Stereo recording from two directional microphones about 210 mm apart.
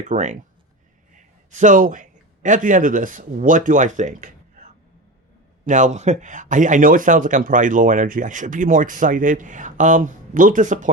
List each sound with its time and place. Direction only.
0.1 s a man's voice: 35° right (ahead or behind)
5.6 s speech: 35° right (ahead or behind)